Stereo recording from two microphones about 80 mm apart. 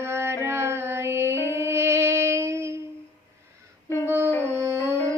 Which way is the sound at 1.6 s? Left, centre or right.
Right.